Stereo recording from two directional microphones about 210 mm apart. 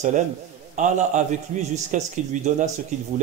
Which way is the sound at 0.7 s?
35° right (ahead or behind).